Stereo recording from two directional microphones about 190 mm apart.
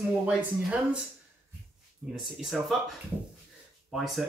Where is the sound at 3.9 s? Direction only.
Centre (ahead or behind).